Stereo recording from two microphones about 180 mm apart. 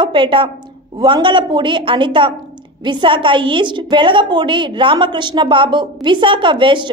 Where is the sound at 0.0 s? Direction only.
30° right (ahead or behind).